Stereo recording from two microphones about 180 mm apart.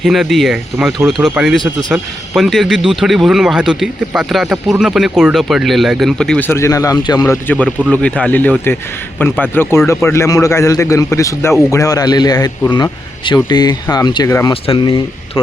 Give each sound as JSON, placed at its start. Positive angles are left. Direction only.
{"t": 0.0, "sound": "speech", "side_deg": 0}
{"t": 6.6, "sound": "a man's voice", "side_deg": 15}